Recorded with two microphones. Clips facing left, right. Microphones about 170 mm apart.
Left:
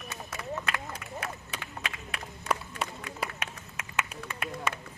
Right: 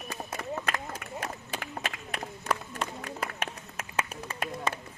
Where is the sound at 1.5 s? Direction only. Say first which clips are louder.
Right 4 dB; 45° right (ahead or behind).